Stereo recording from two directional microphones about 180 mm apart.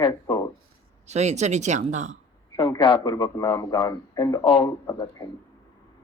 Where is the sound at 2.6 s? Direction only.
25° left (ahead or behind).